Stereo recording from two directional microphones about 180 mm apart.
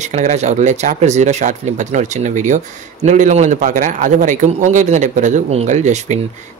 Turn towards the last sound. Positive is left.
turn(degrees=-40)  # may be behind; listen again after turning